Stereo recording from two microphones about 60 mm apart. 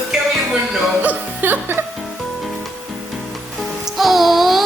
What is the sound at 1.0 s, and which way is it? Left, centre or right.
Music, right.